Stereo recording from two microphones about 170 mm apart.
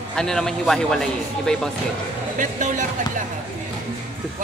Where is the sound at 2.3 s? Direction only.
50° right (ahead or behind).